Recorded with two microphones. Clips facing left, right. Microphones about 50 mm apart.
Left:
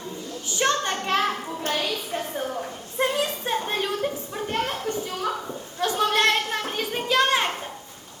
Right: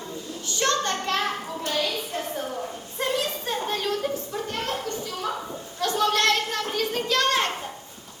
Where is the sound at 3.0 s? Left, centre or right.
Left.